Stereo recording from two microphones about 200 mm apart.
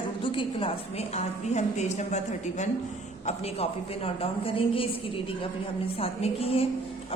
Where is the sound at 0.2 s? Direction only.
25° left (ahead or behind).